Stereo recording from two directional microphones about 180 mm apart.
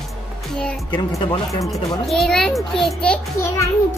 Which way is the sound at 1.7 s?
Centre (ahead or behind).